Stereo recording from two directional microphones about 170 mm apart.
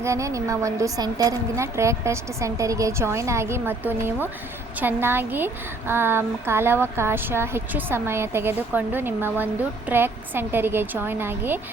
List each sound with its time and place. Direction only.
0.0 s speech: 15° right (ahead or behind)